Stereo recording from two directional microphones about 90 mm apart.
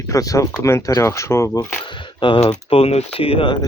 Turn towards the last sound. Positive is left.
turn(degrees=80)